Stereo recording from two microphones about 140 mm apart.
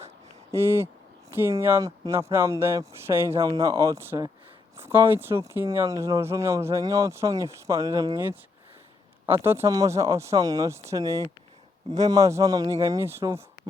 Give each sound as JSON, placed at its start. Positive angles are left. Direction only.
{"t": 0.5, "sound": "speech", "side_deg": -20}
{"t": 9.4, "sound": "speech", "side_deg": -15}